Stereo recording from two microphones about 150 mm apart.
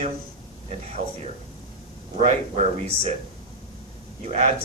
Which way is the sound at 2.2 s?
45° right (ahead or behind).